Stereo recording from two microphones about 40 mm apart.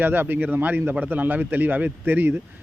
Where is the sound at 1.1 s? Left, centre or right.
Right.